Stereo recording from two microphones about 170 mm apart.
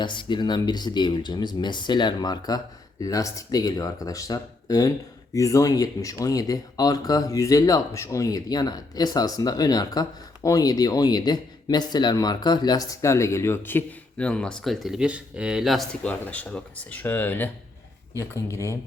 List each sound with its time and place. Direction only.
0.0 s speech: 25° left (ahead or behind)